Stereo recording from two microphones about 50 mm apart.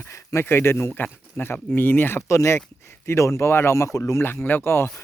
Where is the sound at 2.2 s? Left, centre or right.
Left.